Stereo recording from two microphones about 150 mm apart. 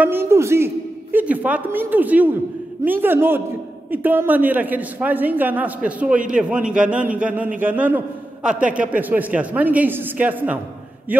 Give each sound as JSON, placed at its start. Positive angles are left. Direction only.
{"t": 0.0, "sound": "a man's voice", "side_deg": -15}